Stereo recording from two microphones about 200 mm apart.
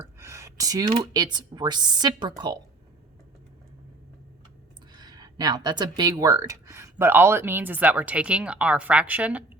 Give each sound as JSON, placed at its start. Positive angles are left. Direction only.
{"t": 0.2, "sound": "speech", "side_deg": -15}
{"t": 4.9, "sound": "speech", "side_deg": -20}